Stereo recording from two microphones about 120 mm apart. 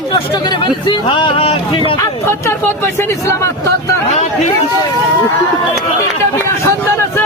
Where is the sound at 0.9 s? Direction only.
45° left (ahead or behind).